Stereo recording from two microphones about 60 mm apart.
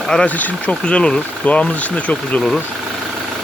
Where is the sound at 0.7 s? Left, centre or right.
Centre.